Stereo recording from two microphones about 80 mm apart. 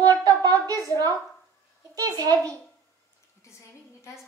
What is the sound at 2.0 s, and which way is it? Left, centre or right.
Speech, right.